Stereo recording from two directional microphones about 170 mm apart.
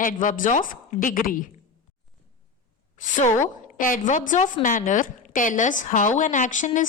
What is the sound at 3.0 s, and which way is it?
Speech, 50° left (ahead or behind).